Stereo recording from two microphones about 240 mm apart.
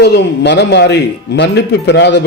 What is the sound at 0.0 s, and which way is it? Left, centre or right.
Speech, left.